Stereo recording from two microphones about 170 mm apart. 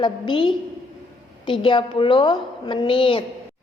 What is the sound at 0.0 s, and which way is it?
A woman's voice, 30° left (ahead or behind).